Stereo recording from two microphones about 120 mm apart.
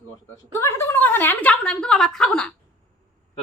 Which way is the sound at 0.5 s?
20° left (ahead or behind).